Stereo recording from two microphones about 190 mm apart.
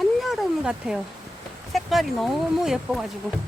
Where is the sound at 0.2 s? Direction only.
Centre (ahead or behind).